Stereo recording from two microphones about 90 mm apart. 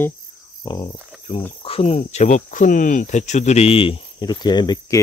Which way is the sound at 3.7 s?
90° left.